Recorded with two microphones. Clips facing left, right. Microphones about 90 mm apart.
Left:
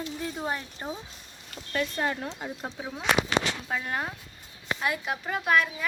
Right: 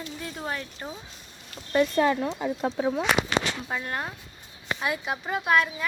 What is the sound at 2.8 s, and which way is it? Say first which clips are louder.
Speech: right 11 dB; 60° right (ahead or behind).